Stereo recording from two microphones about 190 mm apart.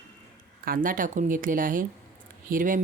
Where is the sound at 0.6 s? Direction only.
50° right (ahead or behind).